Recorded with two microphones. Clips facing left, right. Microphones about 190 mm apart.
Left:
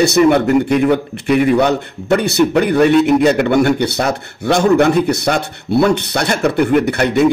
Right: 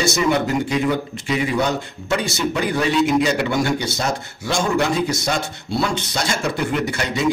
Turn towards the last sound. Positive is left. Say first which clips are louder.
# left 9 dB
turn(degrees=60)  # may be behind; listen again after turning